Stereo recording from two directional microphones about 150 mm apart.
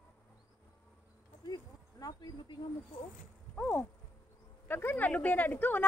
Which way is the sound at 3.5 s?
10° left (ahead or behind).